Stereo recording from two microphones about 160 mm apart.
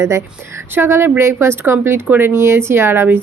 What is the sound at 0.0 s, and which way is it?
A woman's voice, 15° right (ahead or behind).